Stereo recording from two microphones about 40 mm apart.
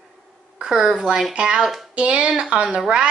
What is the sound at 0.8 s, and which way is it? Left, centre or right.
A woman's voice, centre.